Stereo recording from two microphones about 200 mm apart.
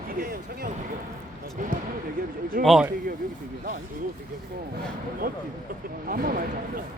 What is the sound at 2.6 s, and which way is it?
Speech, centre (ahead or behind).